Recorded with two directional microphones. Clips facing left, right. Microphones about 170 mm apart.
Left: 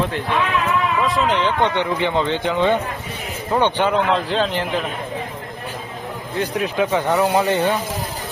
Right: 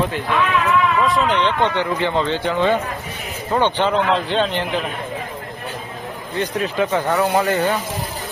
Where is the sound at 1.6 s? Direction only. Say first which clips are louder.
Even; 20° left (ahead or behind); by 4.8 s centre (ahead or behind).